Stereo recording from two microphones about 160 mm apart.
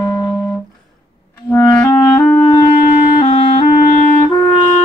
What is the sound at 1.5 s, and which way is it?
Clarinet, 10° left (ahead or behind).